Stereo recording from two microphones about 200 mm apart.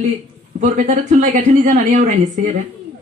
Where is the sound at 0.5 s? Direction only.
35° right (ahead or behind).